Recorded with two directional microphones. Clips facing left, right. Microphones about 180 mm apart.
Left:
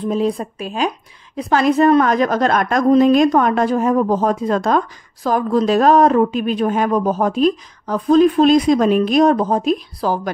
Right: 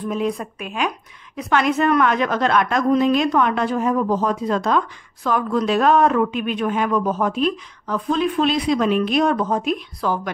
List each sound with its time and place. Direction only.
0.0 s a woman's voice: 30° left (ahead or behind)